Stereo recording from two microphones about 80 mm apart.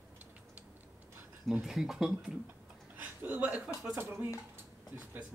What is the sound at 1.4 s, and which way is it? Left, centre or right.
Speech, centre.